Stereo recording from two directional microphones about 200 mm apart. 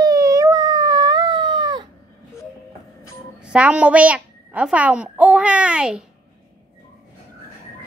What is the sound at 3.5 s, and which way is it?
A child's voice, 5° right (ahead or behind).